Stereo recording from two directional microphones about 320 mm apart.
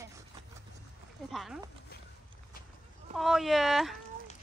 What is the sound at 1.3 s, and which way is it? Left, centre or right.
Speech, centre.